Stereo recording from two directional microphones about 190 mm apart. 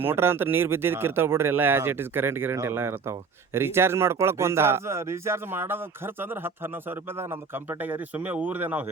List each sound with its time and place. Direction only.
0.0 s speech: 10° right (ahead or behind)